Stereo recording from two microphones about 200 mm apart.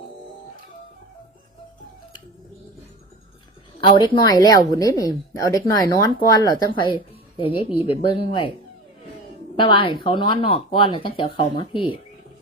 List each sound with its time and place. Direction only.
3.8 s a woman's voice: 25° left (ahead or behind)
9.6 s speech: 25° left (ahead or behind)